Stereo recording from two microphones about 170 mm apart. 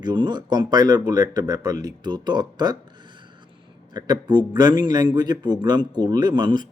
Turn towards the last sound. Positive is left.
turn(degrees=-25)  # may be behind; listen again after turning